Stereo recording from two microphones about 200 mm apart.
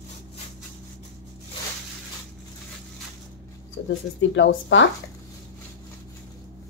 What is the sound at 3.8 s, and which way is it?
Speech, 70° left (ahead or behind).